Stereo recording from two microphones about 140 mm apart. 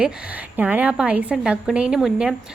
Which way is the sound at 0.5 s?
10° right (ahead or behind).